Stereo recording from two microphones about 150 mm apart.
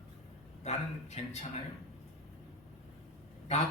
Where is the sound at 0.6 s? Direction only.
45° left (ahead or behind).